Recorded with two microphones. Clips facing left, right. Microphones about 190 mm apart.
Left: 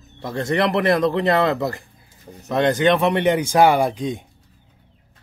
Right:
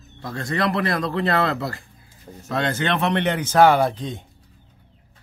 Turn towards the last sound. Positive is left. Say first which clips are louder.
# left 1 dB
turn(degrees=15)  # may be behind; listen again after turning